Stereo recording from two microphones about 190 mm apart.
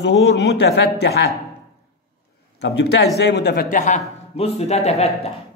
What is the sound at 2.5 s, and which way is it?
A man's voice, 65° left (ahead or behind).